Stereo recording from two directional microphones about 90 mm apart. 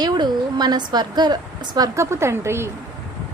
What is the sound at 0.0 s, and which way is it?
A woman's voice, 55° right (ahead or behind).